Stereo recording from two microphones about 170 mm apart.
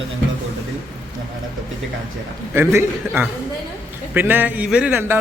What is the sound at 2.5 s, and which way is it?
A man's voice, 10° right (ahead or behind).